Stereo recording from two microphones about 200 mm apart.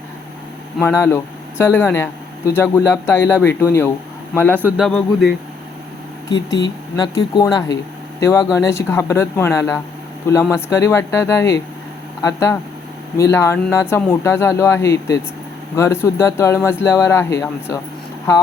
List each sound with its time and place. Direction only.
0.8 s speech: 10° left (ahead or behind)
6.3 s speech: 60° left (ahead or behind)
6.9 s speech: 20° left (ahead or behind)